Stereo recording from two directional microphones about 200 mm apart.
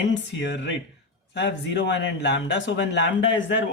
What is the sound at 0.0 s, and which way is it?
Speech, 65° left (ahead or behind).